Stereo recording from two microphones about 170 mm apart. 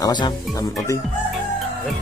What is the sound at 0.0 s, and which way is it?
Speech, 25° left (ahead or behind).